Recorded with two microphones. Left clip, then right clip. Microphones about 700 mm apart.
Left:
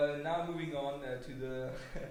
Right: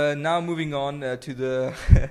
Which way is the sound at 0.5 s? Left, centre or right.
Right.